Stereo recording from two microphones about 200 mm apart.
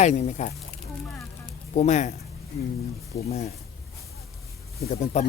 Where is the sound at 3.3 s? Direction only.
30° left (ahead or behind).